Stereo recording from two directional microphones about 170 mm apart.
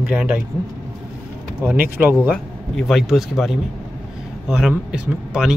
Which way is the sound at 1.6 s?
10° right (ahead or behind).